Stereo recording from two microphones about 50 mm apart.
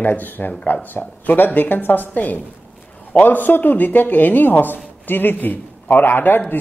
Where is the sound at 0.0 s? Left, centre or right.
Left.